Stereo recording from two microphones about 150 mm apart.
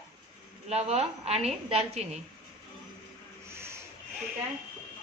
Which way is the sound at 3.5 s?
15° right (ahead or behind).